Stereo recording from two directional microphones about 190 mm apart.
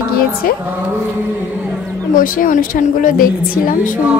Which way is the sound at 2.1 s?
45° left (ahead or behind).